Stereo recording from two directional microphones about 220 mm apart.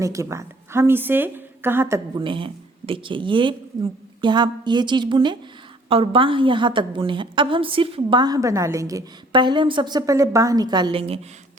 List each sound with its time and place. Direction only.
0.0 s a woman's voice: 15° right (ahead or behind)